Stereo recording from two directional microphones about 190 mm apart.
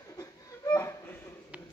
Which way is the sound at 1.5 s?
5° right (ahead or behind).